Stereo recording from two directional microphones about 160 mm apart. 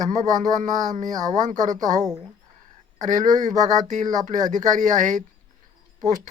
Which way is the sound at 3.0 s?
50° right (ahead or behind).